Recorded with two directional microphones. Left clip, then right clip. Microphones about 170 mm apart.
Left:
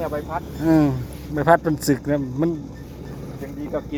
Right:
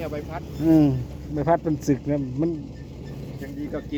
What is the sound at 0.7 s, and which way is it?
Speech, 25° right (ahead or behind).